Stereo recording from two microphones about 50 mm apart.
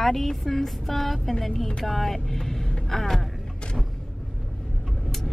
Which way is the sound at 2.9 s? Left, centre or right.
Centre.